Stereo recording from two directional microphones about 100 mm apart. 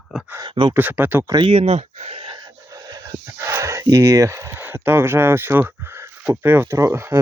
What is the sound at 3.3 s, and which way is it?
Speech, 30° right (ahead or behind).